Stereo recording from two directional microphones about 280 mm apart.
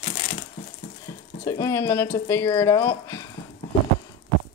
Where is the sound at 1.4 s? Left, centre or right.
Centre.